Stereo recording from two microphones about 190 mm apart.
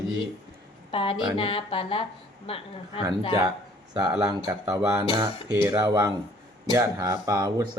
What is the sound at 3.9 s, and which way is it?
Speech, 15° right (ahead or behind).